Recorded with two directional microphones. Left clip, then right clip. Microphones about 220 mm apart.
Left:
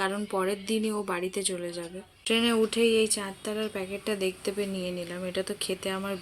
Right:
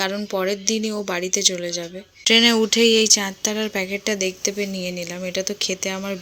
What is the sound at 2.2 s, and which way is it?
Speech, 35° right (ahead or behind).